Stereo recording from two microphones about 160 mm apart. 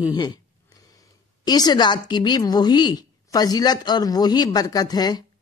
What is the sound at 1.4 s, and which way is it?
Speech, 25° left (ahead or behind).